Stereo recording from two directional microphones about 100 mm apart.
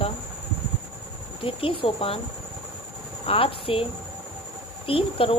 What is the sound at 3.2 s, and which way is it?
Speech, 65° left (ahead or behind).